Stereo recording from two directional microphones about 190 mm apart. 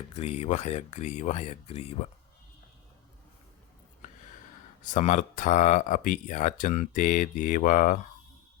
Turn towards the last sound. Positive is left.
turn(degrees=45)  # may be behind; listen again after turning